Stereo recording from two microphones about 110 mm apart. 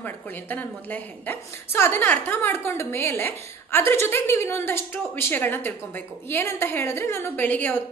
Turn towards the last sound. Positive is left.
turn(degrees=15)  # may be behind; listen again after turning